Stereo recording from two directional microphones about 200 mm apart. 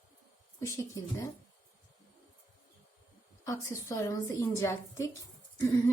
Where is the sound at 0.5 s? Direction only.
15° left (ahead or behind).